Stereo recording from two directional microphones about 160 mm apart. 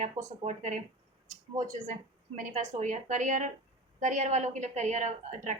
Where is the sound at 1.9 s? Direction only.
50° right (ahead or behind).